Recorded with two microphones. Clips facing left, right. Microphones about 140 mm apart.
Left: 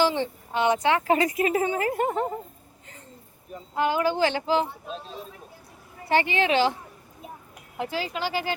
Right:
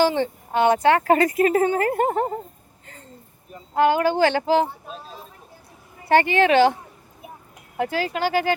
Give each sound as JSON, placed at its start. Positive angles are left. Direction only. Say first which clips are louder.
{"t": 0.0, "sound": "speech", "louder": "right 4 dB", "side_deg": -50}
{"t": 3.8, "sound": "speech", "louder": "right 5 dB", "side_deg": -65}
{"t": 6.1, "sound": "speech", "louder": "right 6 dB", "side_deg": -55}
{"t": 7.8, "sound": "speech", "louder": "right 6 dB", "side_deg": -55}